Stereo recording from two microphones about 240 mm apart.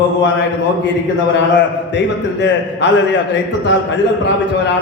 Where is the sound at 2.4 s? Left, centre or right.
Left.